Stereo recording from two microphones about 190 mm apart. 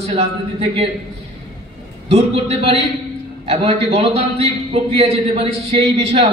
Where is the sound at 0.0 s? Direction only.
30° right (ahead or behind).